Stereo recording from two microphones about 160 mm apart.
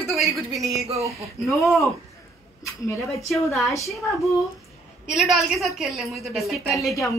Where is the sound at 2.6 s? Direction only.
20° left (ahead or behind).